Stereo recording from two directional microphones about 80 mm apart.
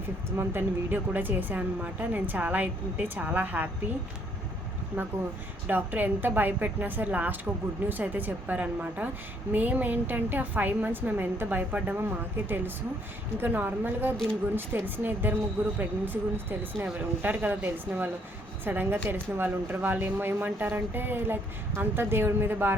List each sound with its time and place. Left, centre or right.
0.3 s speech: right
4.9 s speech: right